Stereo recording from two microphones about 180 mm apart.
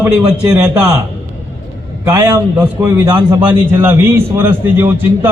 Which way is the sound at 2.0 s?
15° right (ahead or behind).